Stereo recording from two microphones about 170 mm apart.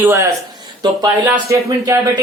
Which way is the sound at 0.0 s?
15° right (ahead or behind).